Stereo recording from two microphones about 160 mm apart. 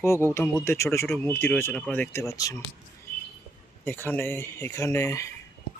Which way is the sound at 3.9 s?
15° left (ahead or behind).